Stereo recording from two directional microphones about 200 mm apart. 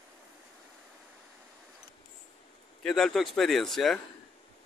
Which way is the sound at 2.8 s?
Centre (ahead or behind).